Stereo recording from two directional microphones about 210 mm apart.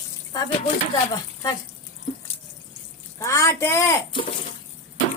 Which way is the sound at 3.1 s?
15° left (ahead or behind).